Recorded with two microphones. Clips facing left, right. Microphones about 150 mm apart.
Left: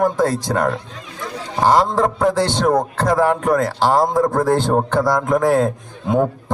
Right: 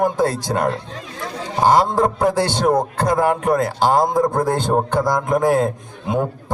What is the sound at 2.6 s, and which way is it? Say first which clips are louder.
Speech: right 1 dB; 20° right (ahead or behind).